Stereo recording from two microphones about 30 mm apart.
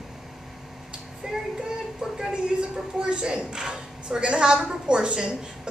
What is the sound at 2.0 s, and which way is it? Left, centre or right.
A woman's voice, right.